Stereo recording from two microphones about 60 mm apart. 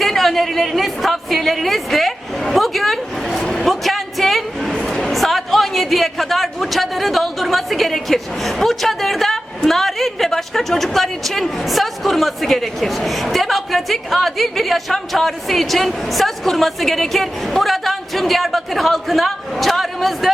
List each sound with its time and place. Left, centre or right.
0.0 s a woman's voice: centre
3.4 s a sound: centre
4.7 s a man's voice: centre